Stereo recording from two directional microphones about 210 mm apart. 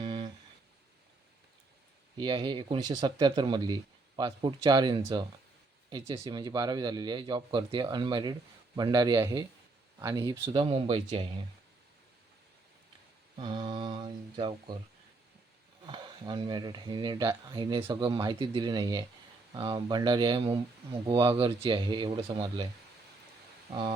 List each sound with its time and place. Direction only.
0.0 s guitar: 25° right (ahead or behind)
2.1 s speech: 20° right (ahead or behind)
13.3 s speech: 20° right (ahead or behind)
15.9 s speech: 20° right (ahead or behind)